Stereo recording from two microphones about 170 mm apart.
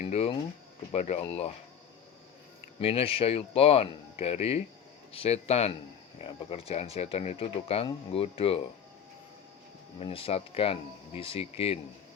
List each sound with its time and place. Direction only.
0.0 s speech: 40° left (ahead or behind)
2.8 s speech: 35° left (ahead or behind)
10.0 s speech: 35° left (ahead or behind)